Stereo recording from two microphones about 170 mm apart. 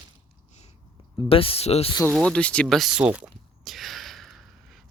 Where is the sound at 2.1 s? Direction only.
5° left (ahead or behind).